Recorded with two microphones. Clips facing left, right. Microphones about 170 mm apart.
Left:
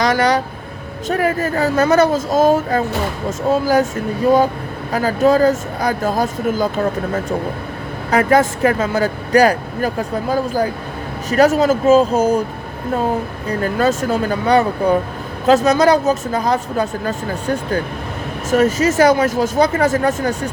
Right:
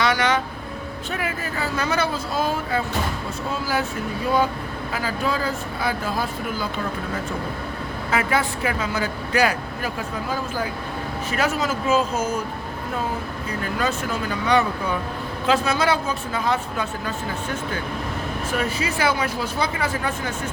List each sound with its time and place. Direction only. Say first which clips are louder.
0.0 s a sound: left 6 dB; 40° left (ahead or behind)
1.0 s speech: left 12 dB; 40° left (ahead or behind)
8.1 s speech: left 9 dB; 45° left (ahead or behind)
13.6 s speech: left 9 dB; 40° left (ahead or behind)